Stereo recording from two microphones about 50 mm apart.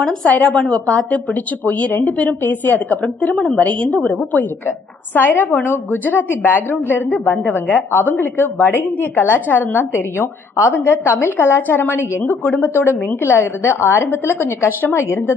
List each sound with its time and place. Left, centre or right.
0.0 s a woman's voice: centre; by 12.2 s left
12.2 s a woman's voice: left
14.9 s a woman's voice: left